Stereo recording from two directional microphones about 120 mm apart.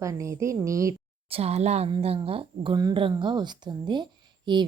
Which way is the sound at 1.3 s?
60° right (ahead or behind).